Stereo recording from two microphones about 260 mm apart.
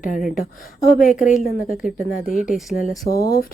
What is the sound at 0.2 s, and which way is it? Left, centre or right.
Speech, centre.